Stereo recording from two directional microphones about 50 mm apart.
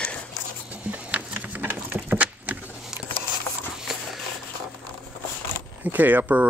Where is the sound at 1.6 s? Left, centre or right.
Right.